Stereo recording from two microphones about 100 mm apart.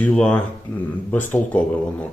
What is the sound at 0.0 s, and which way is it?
A man's voice, 10° left (ahead or behind).